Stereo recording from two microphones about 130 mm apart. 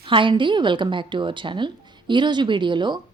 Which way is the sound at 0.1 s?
40° right (ahead or behind).